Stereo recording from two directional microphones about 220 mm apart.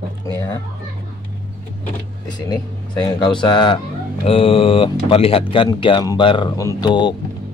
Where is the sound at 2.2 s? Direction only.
20° left (ahead or behind).